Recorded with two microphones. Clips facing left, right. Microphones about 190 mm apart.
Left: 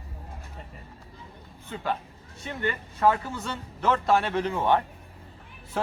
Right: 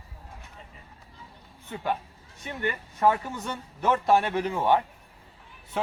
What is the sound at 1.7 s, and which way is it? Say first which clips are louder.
Speech: right 1 dB; 15° right (ahead or behind).